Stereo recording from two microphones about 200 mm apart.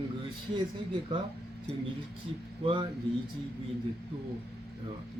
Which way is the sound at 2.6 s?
25° right (ahead or behind).